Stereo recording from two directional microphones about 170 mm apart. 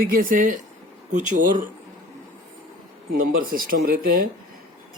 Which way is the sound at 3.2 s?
55° right (ahead or behind).